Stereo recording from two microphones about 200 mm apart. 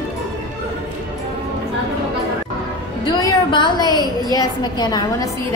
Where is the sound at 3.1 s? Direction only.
20° left (ahead or behind).